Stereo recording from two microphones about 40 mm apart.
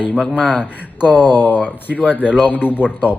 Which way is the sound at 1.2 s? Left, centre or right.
Left.